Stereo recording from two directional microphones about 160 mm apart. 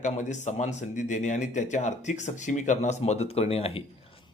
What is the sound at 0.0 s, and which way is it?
A man's voice, 50° left (ahead or behind).